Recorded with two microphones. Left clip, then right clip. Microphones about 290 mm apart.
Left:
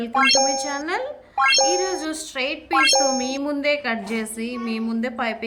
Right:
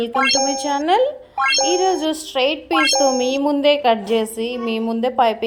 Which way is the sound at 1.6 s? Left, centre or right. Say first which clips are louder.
Right 4 dB; centre.